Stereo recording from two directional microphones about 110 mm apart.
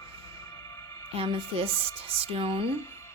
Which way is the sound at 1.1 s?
60° right (ahead or behind).